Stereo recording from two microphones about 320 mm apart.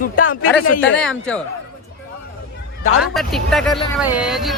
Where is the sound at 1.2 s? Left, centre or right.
Centre.